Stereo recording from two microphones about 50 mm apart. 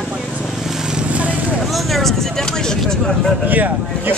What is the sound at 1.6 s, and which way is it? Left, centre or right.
Speech, centre.